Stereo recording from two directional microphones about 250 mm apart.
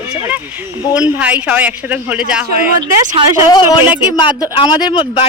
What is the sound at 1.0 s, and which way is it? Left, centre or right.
Speech, centre.